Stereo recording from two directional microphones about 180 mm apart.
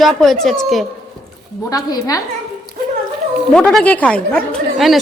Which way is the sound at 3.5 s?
5° left (ahead or behind).